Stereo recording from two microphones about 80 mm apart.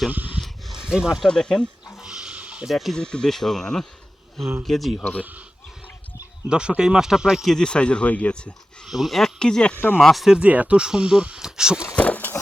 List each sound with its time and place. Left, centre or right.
0.1 s a sound: right
0.4 s a sound: centre
0.8 s speech: centre
1.3 s speech: centre
2.0 s a sound: centre
2.6 s speech: centre
5.2 s speech: right
6.5 s speech: centre
7.5 s speech: centre
8.9 s speech: centre
10.3 s speech: centre
11.9 s a sound: centre